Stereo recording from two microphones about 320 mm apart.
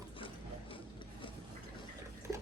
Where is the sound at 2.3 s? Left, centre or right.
Centre.